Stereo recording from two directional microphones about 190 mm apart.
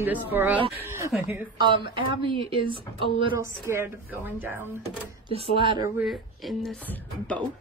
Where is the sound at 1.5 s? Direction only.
25° right (ahead or behind).